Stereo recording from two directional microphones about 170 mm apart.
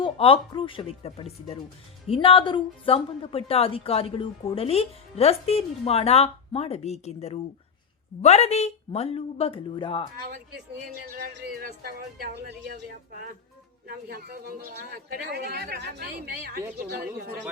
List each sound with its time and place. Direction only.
0.0 s a woman's voice: 30° left (ahead or behind)
11.1 s a man's voice: 70° right (ahead or behind)
12.7 s a man's voice: 55° right (ahead or behind)